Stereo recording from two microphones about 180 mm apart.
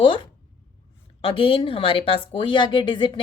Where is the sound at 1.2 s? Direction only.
30° left (ahead or behind).